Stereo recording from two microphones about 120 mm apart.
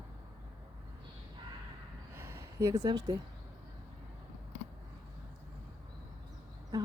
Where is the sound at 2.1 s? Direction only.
20° right (ahead or behind).